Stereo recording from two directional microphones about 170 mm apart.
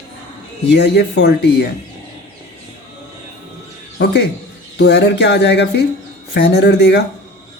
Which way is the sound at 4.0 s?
90° left.